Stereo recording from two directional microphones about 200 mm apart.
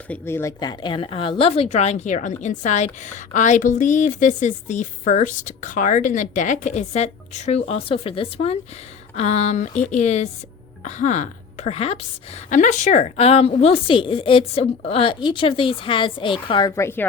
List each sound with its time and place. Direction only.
0.1 s a woman's voice: 10° left (ahead or behind)